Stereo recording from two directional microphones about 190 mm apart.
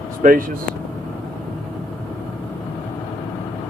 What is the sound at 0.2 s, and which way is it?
Speech, 45° right (ahead or behind).